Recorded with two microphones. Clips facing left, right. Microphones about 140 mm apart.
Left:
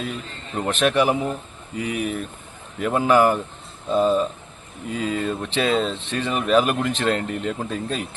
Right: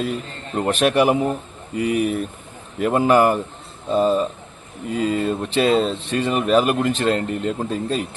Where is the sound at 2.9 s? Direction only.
5° right (ahead or behind).